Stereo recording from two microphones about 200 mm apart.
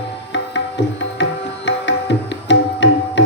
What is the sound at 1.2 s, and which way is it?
Music, 65° left (ahead or behind).